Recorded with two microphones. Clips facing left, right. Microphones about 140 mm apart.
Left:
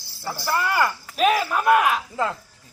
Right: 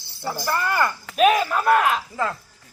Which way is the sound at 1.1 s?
90° right.